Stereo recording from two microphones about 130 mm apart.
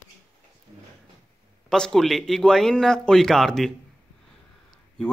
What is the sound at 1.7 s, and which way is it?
A man's voice, 5° left (ahead or behind).